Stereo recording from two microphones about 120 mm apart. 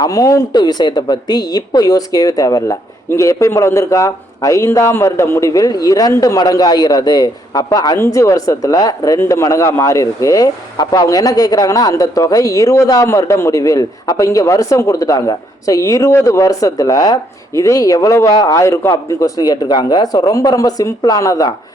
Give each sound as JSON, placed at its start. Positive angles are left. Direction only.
{"t": 0.0, "sound": "speech", "side_deg": 30}